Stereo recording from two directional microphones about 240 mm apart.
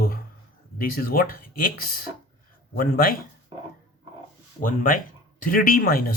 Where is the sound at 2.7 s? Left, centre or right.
Left.